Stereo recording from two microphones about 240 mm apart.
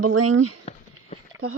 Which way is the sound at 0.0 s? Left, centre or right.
Right.